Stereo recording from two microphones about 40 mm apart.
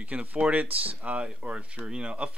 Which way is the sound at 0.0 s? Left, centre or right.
Right.